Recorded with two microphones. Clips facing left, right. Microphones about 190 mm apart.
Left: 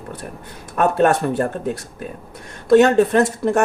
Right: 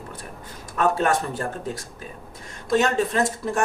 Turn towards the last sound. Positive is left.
turn(degrees=65)  # may be behind; listen again after turning